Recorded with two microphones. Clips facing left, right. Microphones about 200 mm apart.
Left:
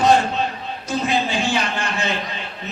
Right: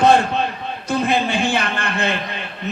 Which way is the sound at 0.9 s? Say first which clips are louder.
Right 2 dB; 55° right (ahead or behind).